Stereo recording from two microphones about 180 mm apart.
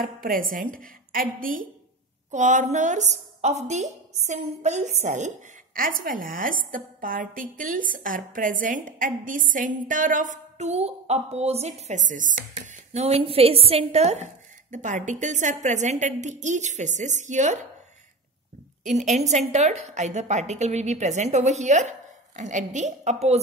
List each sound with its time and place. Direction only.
0.0 s a woman's voice: 50° right (ahead or behind)
18.9 s a woman's voice: 40° right (ahead or behind)